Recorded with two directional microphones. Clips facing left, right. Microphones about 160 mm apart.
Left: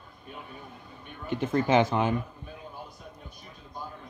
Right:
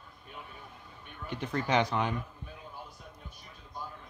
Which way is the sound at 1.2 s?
5° left (ahead or behind).